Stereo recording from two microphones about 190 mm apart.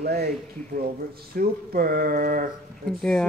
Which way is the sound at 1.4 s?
50° right (ahead or behind).